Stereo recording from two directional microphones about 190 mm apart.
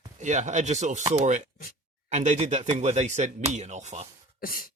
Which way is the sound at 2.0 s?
40° right (ahead or behind).